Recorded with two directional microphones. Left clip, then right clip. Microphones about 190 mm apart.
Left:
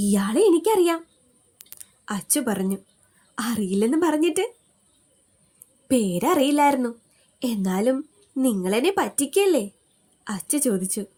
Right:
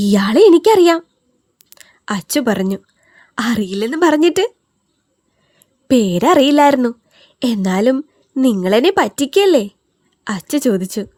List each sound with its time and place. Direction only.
0.0 s speech: 50° right (ahead or behind)
5.9 s speech: 50° right (ahead or behind)